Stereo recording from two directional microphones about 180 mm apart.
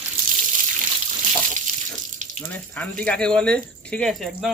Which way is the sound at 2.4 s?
10° left (ahead or behind).